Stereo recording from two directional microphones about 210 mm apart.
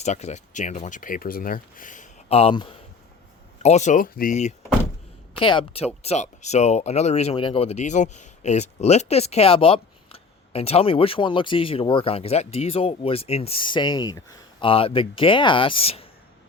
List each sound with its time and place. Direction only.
0.0 s speech: 30° left (ahead or behind)
5.4 s speech: 25° left (ahead or behind)